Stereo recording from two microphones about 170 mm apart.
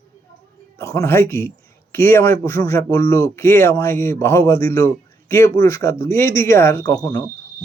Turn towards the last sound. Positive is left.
turn(degrees=25)  # may be behind; listen again after turning